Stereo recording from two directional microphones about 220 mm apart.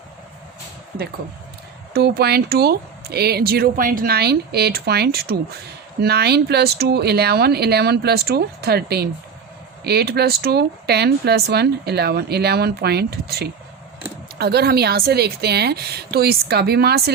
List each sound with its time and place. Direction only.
1.9 s speech: 45° right (ahead or behind)